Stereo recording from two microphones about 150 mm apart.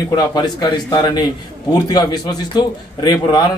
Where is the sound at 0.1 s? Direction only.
25° left (ahead or behind).